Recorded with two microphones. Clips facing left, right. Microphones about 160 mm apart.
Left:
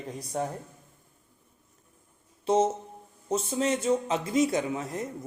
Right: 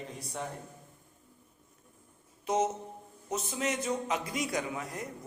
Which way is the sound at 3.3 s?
30° left (ahead or behind).